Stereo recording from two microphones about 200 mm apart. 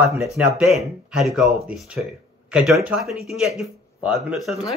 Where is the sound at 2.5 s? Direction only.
5° right (ahead or behind).